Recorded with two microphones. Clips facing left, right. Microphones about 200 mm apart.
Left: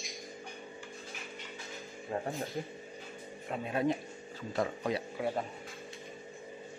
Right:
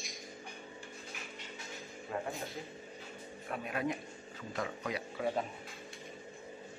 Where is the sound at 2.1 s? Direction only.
30° left (ahead or behind).